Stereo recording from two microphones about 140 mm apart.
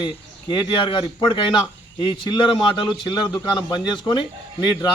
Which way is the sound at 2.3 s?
35° left (ahead or behind).